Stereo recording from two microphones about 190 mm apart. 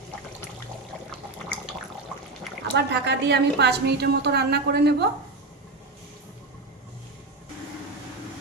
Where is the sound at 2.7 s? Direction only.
65° right (ahead or behind).